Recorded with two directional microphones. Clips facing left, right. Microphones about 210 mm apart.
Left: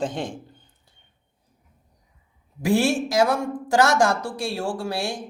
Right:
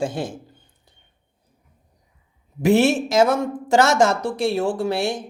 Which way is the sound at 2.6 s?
20° right (ahead or behind).